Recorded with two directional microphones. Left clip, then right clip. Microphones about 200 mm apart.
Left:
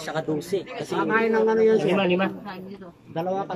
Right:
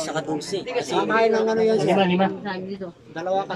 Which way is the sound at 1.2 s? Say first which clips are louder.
Even; 15° right (ahead or behind).